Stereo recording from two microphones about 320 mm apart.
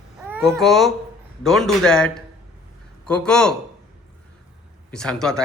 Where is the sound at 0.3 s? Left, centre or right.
Centre.